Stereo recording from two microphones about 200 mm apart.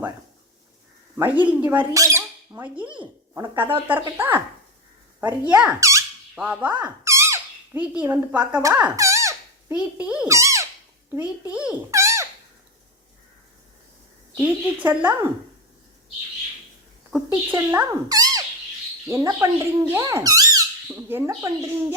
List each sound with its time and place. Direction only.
1.1 s squawk: 10° right (ahead or behind)
3.8 s a woman's voice: 10° right (ahead or behind)
6.3 s squeak: 5° right (ahead or behind)
9.7 s a child's voice: 5° right (ahead or behind)
14.3 s a woman's voice: 10° right (ahead or behind)
17.5 s a child's voice: 10° right (ahead or behind)